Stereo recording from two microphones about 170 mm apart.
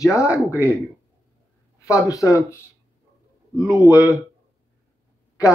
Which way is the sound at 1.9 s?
20° left (ahead or behind).